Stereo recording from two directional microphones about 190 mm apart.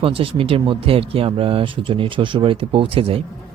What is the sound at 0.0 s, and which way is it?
Speech, 30° right (ahead or behind).